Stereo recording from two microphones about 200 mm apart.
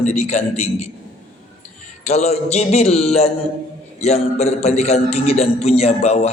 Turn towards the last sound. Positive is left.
turn(degrees=30)  # may be behind; listen again after turning